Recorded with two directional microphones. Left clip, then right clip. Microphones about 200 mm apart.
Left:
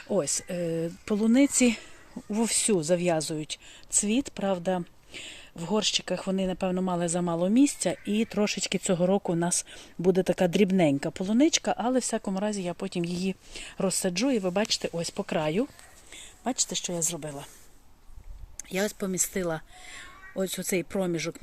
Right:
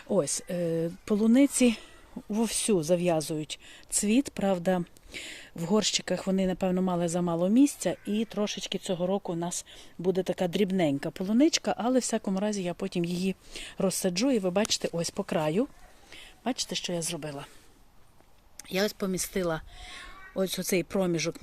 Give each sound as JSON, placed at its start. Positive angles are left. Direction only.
{"t": 0.1, "sound": "speech", "side_deg": -5}
{"t": 3.9, "sound": "speech", "side_deg": -10}
{"t": 8.1, "sound": "speech", "side_deg": 20}
{"t": 11.1, "sound": "speech", "side_deg": 5}
{"t": 18.7, "sound": "speech", "side_deg": 0}